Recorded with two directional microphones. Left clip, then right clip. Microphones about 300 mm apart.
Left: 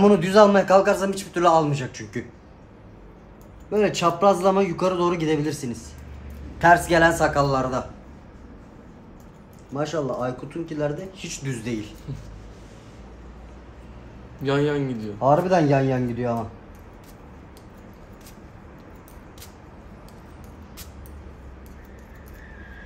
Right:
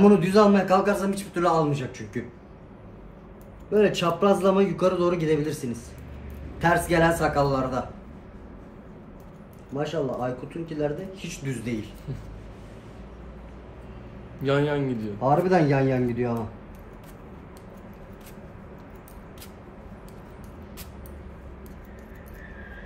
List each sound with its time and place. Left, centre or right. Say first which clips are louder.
0.0 s a man's voice: left 3 dB; centre
3.7 s a man's voice: left 1 dB; centre
9.8 s a man's voice: left 2 dB; centre
14.4 s a man's voice: left 1 dB; centre